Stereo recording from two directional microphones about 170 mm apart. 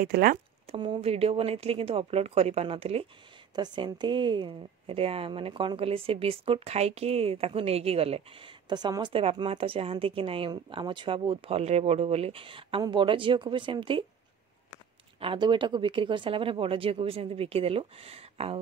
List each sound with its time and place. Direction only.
0.0 s speech: 60° right (ahead or behind)
0.7 s a woman's voice: 30° right (ahead or behind)
15.1 s a woman's voice: 30° right (ahead or behind)